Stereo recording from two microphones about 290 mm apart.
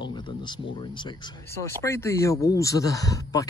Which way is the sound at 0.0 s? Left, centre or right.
Centre.